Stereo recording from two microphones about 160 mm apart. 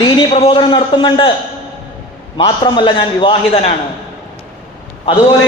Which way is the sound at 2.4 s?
30° left (ahead or behind).